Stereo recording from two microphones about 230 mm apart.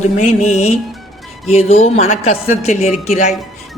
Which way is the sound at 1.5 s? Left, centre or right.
Left.